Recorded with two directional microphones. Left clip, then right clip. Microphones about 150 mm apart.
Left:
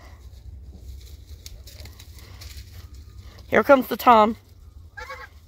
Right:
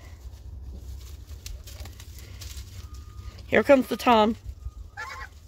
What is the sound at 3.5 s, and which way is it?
Speech, 10° left (ahead or behind).